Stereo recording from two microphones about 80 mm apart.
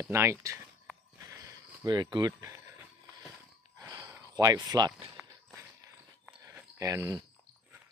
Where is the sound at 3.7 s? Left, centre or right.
Right.